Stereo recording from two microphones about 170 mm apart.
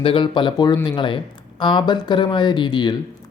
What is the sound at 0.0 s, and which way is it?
Speech, 30° left (ahead or behind).